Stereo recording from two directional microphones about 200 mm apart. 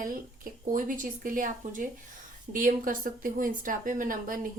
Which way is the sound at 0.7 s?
45° right (ahead or behind).